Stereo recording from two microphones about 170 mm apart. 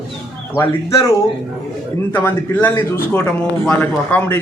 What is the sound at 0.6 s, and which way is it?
Speech, 20° left (ahead or behind).